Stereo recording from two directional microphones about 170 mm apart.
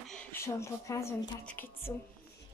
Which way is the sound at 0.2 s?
15° left (ahead or behind).